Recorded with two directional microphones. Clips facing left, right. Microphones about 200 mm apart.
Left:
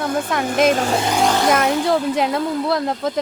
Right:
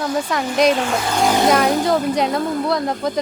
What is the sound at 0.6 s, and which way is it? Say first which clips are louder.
Speech: even; 40° left (ahead or behind).